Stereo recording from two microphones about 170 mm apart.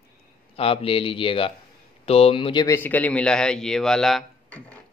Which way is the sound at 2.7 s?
10° left (ahead or behind).